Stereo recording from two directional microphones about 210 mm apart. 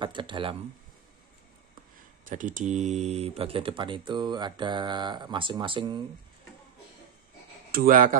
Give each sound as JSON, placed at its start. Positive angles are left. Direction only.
{"t": 0.0, "sound": "speech", "side_deg": -25}
{"t": 2.2, "sound": "speech", "side_deg": -40}
{"t": 7.7, "sound": "speech", "side_deg": -40}